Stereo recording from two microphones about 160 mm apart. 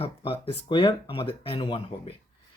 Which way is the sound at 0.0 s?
35° left (ahead or behind).